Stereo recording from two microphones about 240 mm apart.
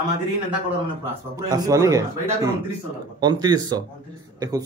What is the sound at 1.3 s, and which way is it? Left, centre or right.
A man's voice, centre.